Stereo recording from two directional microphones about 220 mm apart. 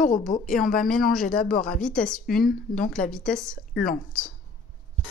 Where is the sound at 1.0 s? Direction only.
Centre (ahead or behind).